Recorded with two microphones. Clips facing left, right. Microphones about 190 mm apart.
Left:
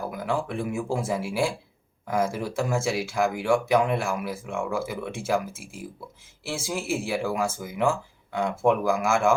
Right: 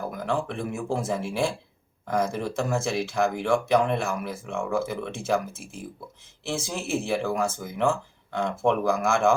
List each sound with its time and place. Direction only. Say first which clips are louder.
0.1 s speech: even; 10° left (ahead or behind)